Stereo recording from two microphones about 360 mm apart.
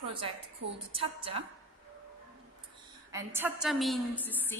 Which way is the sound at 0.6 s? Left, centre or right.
Right.